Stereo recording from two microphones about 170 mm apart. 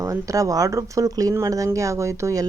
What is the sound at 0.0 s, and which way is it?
Speech, 20° right (ahead or behind).